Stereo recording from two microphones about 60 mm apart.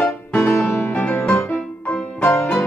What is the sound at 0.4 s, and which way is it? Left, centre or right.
Music, left.